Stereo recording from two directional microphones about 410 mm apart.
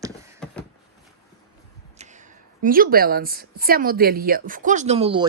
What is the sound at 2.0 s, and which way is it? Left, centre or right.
A woman's voice, centre.